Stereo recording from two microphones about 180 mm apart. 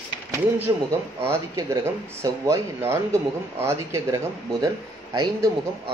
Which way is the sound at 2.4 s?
15° right (ahead or behind).